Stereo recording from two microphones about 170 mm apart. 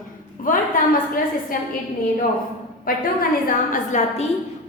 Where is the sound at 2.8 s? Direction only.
55° left (ahead or behind).